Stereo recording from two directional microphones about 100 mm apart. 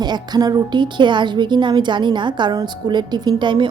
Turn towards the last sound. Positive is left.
turn(degrees=-50)  # may be behind; listen again after turning